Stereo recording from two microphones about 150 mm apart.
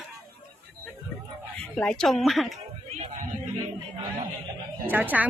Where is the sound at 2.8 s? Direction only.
45° right (ahead or behind).